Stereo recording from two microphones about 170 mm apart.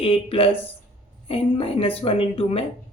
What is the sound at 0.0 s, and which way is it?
A woman's voice, 30° left (ahead or behind).